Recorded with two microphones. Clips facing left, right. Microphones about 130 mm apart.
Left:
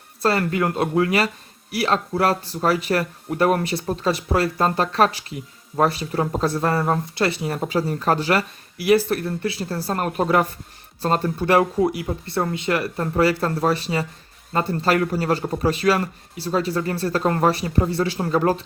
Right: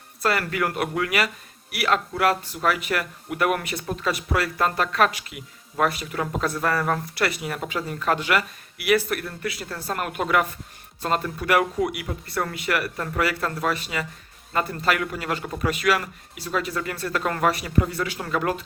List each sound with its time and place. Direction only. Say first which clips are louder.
0.2 s speech: left 4 dB; 30° left (ahead or behind)